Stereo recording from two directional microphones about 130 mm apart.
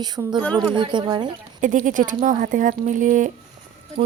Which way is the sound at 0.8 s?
35° right (ahead or behind).